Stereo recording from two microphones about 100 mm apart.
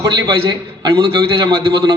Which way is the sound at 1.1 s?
55° right (ahead or behind).